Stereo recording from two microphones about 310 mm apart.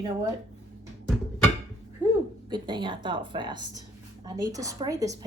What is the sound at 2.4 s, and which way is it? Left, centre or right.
A woman's voice, centre.